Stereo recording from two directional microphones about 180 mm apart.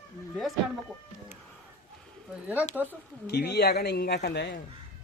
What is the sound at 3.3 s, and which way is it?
A man's voice, 65° left (ahead or behind).